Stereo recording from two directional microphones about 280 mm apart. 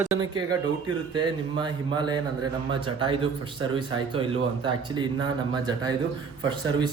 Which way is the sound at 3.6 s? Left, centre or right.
Centre.